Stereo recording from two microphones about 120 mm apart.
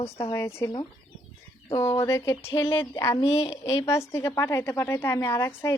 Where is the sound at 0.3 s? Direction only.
25° left (ahead or behind).